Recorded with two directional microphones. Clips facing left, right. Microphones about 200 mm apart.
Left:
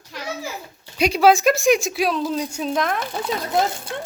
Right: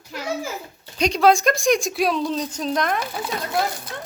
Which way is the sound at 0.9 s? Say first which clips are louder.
Left 1 dB; 5° left (ahead or behind).